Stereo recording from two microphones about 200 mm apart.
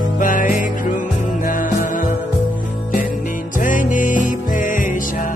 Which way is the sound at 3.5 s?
40° left (ahead or behind).